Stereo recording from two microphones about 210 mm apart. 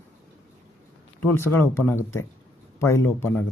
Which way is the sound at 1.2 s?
10° left (ahead or behind).